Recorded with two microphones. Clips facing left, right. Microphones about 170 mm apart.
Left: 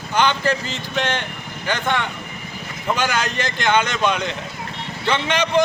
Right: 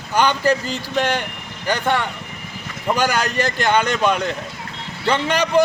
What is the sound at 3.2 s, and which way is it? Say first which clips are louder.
Speech: right 4 dB; 35° right (ahead or behind).